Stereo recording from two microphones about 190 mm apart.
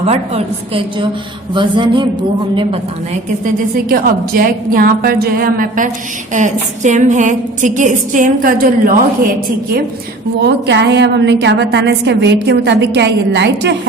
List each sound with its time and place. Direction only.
0.0 s a woman's voice: 30° right (ahead or behind)
3.4 s a woman's voice: 50° right (ahead or behind)
10.4 s a woman's voice: 65° right (ahead or behind)